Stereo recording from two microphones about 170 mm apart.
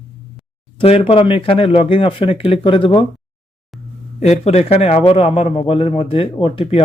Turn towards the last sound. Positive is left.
turn(degrees=35)  # may be behind; listen again after turning